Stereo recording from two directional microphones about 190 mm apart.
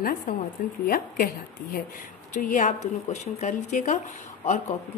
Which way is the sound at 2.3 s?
40° left (ahead or behind).